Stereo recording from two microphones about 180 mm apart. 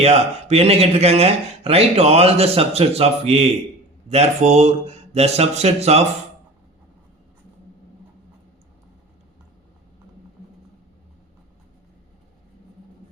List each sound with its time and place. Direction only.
0.0 s speech: 35° right (ahead or behind)